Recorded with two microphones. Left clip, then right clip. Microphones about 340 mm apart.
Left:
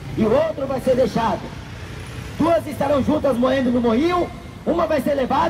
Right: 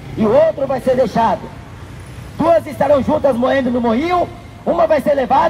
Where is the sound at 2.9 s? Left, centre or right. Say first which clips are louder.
Right 5 dB; centre.